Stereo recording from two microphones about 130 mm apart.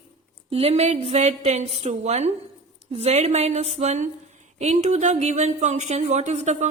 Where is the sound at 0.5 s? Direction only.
55° right (ahead or behind).